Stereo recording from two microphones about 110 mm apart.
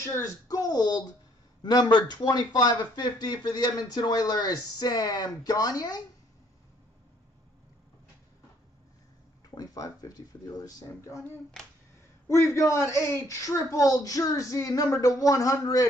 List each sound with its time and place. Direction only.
0.0 s speech: 30° left (ahead or behind)
9.6 s speech: 35° left (ahead or behind)
12.5 s speech: 25° left (ahead or behind)